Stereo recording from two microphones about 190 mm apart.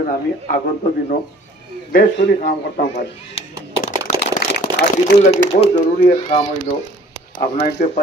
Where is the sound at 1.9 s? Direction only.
45° left (ahead or behind).